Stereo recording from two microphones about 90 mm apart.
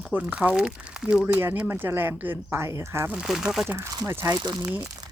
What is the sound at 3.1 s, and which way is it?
Speech, 5° right (ahead or behind).